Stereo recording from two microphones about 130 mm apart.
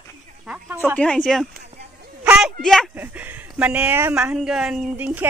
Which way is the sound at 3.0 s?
15° right (ahead or behind).